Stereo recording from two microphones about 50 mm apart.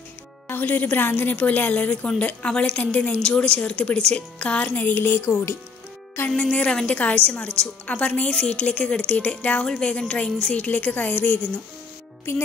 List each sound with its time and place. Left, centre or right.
0.5 s a woman's voice: left
4.7 s a sound: left
6.2 s music: left
6.5 s a woman's voice: left